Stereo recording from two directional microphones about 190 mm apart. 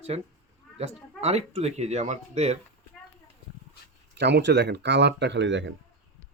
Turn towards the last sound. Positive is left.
turn(degrees=-70)  # may be behind; listen again after turning